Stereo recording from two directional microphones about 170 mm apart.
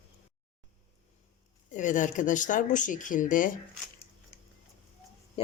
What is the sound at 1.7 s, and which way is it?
Speech, 45° left (ahead or behind).